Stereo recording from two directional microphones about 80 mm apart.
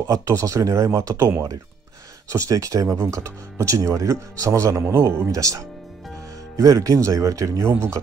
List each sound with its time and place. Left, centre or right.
0.1 s speech: right